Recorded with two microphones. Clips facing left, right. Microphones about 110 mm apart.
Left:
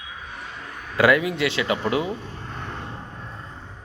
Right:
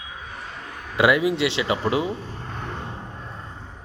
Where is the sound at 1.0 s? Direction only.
25° right (ahead or behind).